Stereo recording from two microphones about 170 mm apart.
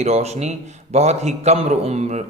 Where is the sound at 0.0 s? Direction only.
40° right (ahead or behind).